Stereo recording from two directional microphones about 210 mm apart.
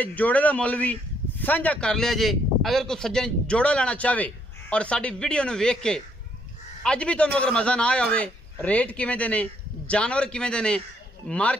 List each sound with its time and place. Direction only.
0.0 s a man's voice: 5° left (ahead or behind)